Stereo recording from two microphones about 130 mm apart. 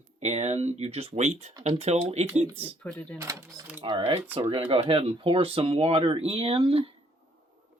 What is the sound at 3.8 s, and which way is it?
Speech, 40° right (ahead or behind).